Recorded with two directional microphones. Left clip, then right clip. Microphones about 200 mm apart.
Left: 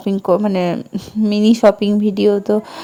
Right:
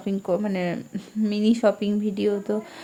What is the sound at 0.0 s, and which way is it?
Speech, 30° left (ahead or behind).